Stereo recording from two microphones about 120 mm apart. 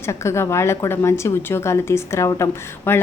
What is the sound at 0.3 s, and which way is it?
Speech, 25° left (ahead or behind).